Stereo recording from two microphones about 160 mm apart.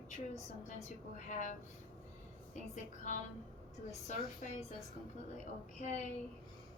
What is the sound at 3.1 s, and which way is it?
Speech, 50° left (ahead or behind).